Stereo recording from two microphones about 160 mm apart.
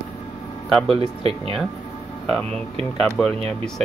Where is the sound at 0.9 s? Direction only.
40° right (ahead or behind).